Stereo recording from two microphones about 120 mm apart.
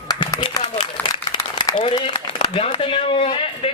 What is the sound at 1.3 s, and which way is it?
A woman's voice, 35° left (ahead or behind).